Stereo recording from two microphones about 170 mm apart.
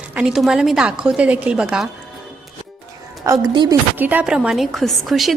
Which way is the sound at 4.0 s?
10° right (ahead or behind).